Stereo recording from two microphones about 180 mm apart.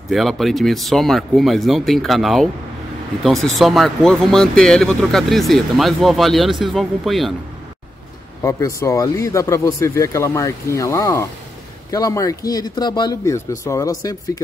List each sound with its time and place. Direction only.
0.1 s speech: centre (ahead or behind)
3.5 s speech: centre (ahead or behind)
8.4 s speech: 15° left (ahead or behind)